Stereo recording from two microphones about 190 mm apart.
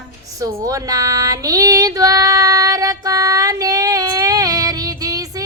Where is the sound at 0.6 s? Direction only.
15° right (ahead or behind).